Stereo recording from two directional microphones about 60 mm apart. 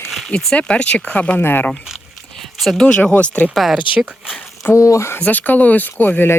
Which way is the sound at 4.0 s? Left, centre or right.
Centre.